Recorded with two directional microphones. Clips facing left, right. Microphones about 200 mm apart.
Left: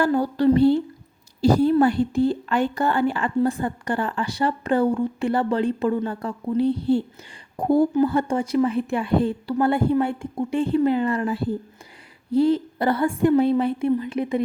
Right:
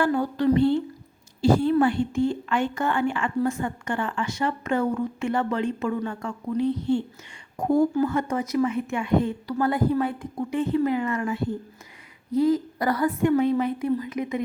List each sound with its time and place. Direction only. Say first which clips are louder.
0.0 s a woman's voice: left 3 dB; 35° left (ahead or behind)